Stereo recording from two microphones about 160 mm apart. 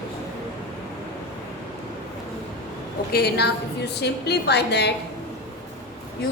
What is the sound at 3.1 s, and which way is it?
A woman's voice, 80° left.